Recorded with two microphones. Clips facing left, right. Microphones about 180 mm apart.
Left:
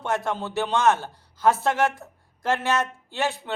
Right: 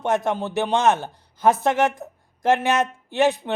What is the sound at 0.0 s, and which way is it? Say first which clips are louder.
Speech: right 4 dB; 20° right (ahead or behind).